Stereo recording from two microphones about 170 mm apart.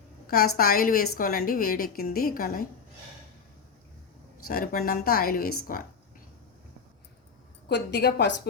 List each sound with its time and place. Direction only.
0.3 s a woman's voice: 60° left (ahead or behind)
4.4 s a woman's voice: 60° left (ahead or behind)
7.7 s a woman's voice: 90° left